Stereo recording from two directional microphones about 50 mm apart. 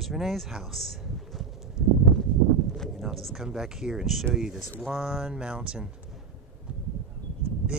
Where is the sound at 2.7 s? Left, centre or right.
Centre.